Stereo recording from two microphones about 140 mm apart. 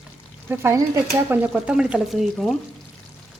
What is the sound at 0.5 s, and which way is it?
Stir, 20° right (ahead or behind).